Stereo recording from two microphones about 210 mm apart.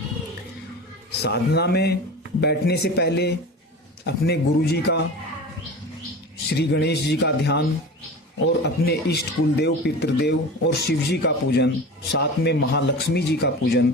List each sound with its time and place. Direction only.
1.2 s speech: 50° left (ahead or behind)
6.5 s speech: 55° left (ahead or behind)
8.6 s speech: 50° left (ahead or behind)